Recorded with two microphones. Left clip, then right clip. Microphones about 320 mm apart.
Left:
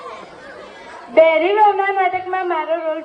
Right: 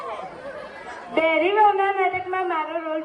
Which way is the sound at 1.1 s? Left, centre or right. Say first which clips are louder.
Left 7 dB; left.